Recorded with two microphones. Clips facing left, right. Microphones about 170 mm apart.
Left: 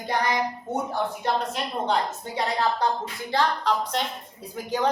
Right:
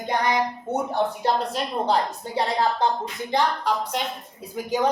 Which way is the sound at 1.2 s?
35° right (ahead or behind).